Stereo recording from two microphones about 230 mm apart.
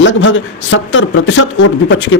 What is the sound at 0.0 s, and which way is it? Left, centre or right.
A man's voice, left.